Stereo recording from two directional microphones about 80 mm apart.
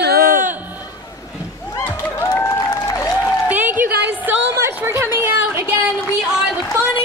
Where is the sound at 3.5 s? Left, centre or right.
Right.